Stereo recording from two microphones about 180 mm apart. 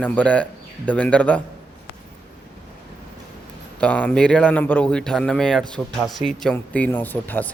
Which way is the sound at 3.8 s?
5° left (ahead or behind).